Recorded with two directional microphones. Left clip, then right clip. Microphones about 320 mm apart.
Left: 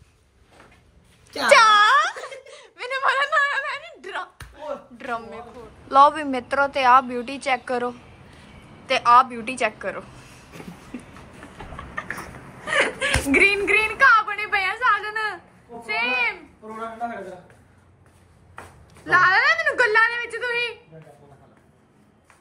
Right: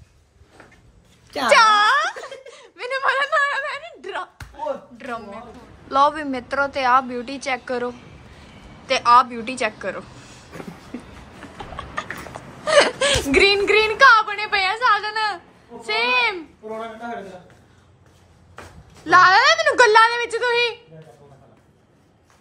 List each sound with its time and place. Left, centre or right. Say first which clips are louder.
1.3 s wail: even; centre
4.6 s a sound: right 5 dB; centre
5.9 s a woman's voice: left 2 dB; centre
10.9 s a sound: right 2 dB; centre
12.6 s whimper: right 6 dB; centre
19.0 s a woman's voice: right 4 dB; centre